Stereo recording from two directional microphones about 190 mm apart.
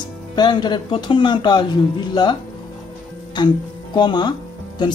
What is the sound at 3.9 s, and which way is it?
Speech, 20° left (ahead or behind).